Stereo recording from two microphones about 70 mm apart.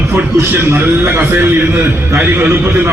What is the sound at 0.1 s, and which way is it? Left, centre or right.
A man's voice, right.